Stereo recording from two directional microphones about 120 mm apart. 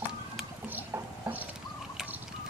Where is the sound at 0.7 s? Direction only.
20° right (ahead or behind).